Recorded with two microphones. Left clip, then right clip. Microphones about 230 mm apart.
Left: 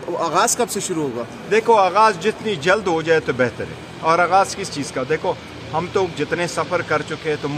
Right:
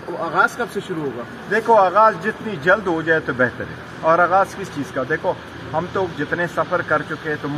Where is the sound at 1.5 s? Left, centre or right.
Centre.